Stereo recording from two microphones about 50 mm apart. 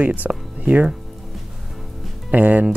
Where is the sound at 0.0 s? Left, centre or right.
Right.